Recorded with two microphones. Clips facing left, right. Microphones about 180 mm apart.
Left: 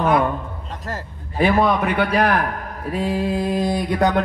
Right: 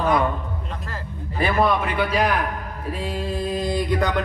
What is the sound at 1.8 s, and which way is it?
A man's voice, 60° left (ahead or behind).